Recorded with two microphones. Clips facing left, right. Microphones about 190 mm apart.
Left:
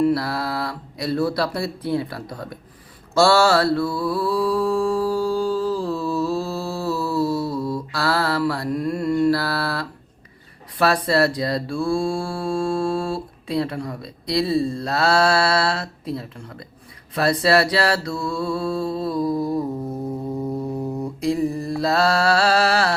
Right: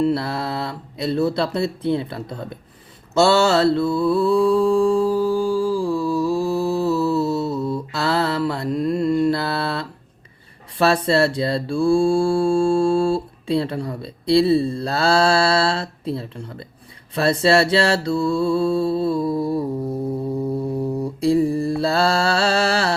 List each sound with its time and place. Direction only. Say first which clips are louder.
0.0 s mantra: even; 25° right (ahead or behind)
21.2 s mantra: right 5 dB; 30° right (ahead or behind)